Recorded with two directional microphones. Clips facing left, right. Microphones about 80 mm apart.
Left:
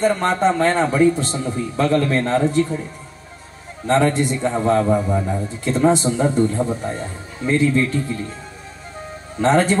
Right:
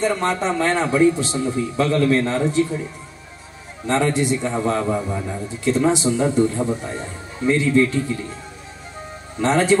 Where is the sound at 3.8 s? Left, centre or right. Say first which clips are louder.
Left 2 dB; left.